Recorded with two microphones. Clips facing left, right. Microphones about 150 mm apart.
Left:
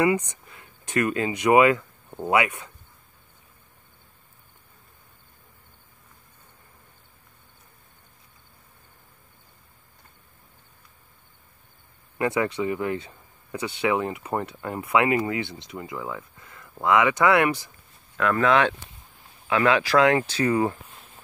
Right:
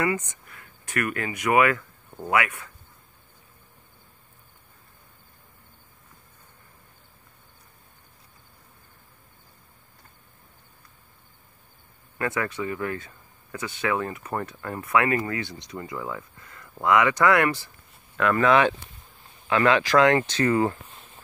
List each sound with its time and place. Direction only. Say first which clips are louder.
0.0 s speech: left 4 dB; 15° left (ahead or behind)
12.2 s speech: left 4 dB; 20° left (ahead or behind)
15.7 s a sound: right 3 dB; 20° left (ahead or behind)
16.8 s speech: even; 20° left (ahead or behind)
18.1 s speech: right 1 dB; centre (ahead or behind)
19.4 s speech: even; 5° left (ahead or behind)